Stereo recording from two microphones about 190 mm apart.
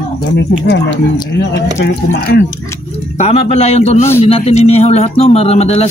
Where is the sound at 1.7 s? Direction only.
70° left (ahead or behind).